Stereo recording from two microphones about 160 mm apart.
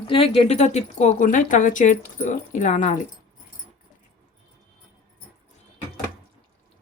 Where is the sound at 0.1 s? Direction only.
35° left (ahead or behind).